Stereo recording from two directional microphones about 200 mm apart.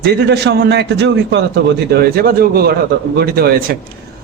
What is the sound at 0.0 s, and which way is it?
A man's voice, 55° right (ahead or behind).